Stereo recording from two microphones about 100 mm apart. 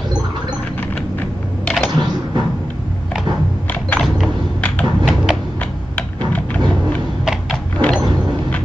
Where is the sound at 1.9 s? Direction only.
45° right (ahead or behind).